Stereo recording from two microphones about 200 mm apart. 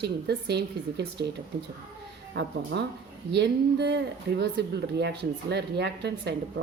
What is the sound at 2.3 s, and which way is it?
Speech, 60° right (ahead or behind).